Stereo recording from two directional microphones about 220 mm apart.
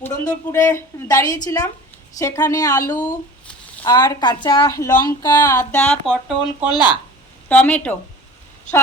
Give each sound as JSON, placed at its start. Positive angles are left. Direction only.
{"t": 0.0, "sound": "a woman's voice", "side_deg": 15}
{"t": 6.7, "sound": "speech", "side_deg": 20}
{"t": 7.4, "sound": "a woman's voice", "side_deg": 5}